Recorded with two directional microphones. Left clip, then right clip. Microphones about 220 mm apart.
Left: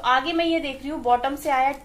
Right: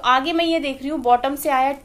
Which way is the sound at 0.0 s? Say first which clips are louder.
Right 3 dB; 50° right (ahead or behind).